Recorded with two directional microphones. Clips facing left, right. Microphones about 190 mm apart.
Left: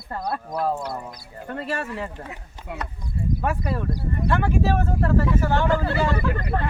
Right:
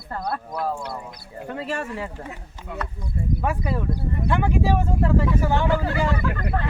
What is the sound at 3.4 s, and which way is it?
Speech, 10° right (ahead or behind).